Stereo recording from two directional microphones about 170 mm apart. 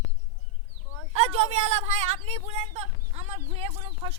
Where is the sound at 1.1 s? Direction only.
35° right (ahead or behind).